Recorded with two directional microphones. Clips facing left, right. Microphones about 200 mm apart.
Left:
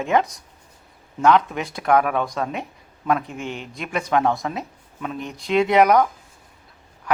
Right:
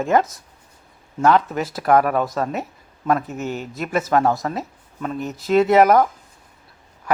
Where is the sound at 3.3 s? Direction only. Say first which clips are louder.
Right 4 dB; 40° right (ahead or behind).